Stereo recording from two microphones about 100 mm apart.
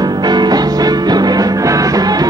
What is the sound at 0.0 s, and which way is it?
Music, 45° right (ahead or behind).